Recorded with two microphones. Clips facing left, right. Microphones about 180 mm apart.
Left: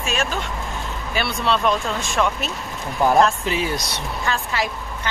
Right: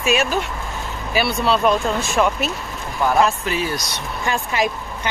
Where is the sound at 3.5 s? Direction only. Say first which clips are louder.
Even; 20° left (ahead or behind).